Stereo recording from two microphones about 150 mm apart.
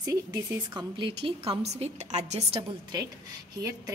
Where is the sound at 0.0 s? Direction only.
25° right (ahead or behind); by 2.6 s 45° right (ahead or behind).